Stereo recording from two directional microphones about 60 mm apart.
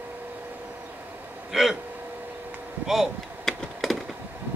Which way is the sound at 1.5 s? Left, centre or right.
Centre.